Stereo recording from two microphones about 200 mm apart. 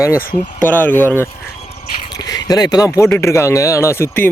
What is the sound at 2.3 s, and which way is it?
Speech, 20° left (ahead or behind).